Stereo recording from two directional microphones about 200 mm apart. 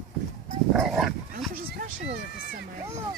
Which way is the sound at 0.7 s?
Centre (ahead or behind).